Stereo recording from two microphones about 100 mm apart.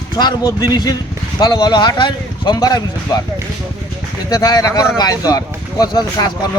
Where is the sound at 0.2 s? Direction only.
40° left (ahead or behind).